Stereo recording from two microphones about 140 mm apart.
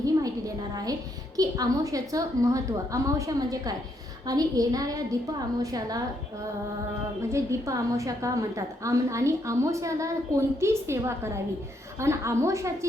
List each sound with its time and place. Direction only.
0.0 s a sound: 25° right (ahead or behind)
1.4 s a woman's voice: 25° right (ahead or behind)
7.2 s a woman's voice: 20° right (ahead or behind)